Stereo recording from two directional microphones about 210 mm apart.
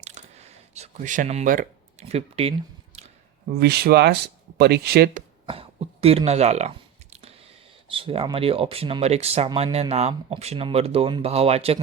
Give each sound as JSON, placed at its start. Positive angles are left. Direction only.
{"t": 0.0, "sound": "a sound", "side_deg": -30}
{"t": 3.5, "sound": "speech", "side_deg": -50}
{"t": 5.5, "sound": "a sound", "side_deg": -25}
{"t": 7.9, "sound": "speech", "side_deg": -25}
{"t": 9.5, "sound": "speech", "side_deg": -20}
{"t": 9.9, "sound": "speech", "side_deg": -30}